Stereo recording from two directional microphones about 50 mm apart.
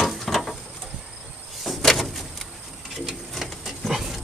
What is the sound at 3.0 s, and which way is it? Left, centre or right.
Printer, centre.